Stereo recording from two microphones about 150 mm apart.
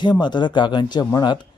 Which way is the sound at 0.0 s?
30° left (ahead or behind).